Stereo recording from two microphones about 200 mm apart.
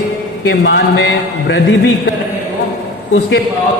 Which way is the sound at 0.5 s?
60° left (ahead or behind).